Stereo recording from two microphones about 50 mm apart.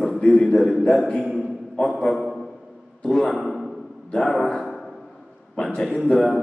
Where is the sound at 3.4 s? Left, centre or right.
Centre.